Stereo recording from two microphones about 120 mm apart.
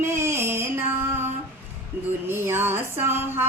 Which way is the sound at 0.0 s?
20° right (ahead or behind).